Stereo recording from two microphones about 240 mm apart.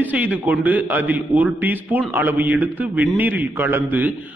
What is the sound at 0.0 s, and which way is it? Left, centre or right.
A man's voice, centre.